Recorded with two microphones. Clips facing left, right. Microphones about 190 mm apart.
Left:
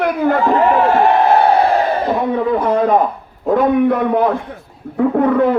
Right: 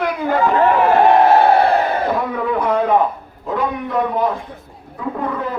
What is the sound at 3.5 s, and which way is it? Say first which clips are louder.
A man's voice: left 9 dB; 60° left (ahead or behind).